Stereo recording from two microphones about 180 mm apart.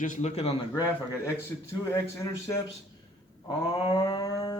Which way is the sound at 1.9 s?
15° left (ahead or behind).